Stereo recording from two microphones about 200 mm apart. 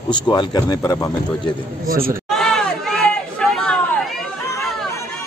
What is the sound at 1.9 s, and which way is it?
Speech, 45° right (ahead or behind).